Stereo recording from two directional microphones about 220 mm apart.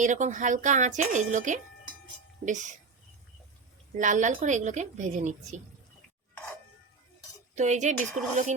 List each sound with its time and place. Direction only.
0.0 s a woman's voice: 35° right (ahead or behind)
3.9 s a woman's voice: 35° right (ahead or behind)
7.5 s a woman's voice: 30° right (ahead or behind)